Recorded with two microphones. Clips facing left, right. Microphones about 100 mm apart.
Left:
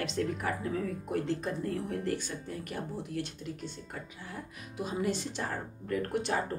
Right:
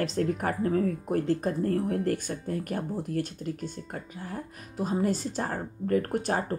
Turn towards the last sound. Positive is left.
turn(degrees=-45)  # may be behind; listen again after turning